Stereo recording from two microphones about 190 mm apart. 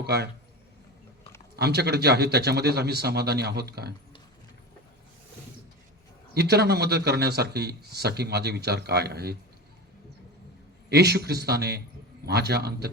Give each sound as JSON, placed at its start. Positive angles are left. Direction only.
{"t": 0.0, "sound": "a man's voice", "side_deg": -60}
{"t": 1.5, "sound": "speech", "side_deg": -60}
{"t": 6.3, "sound": "speech", "side_deg": -60}
{"t": 10.8, "sound": "speech", "side_deg": -60}